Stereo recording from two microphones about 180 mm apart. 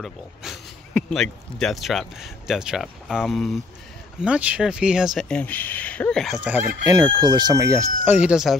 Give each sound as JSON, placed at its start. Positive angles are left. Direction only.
{"t": 0.0, "sound": "speech", "side_deg": 0}
{"t": 6.9, "sound": "speech", "side_deg": -20}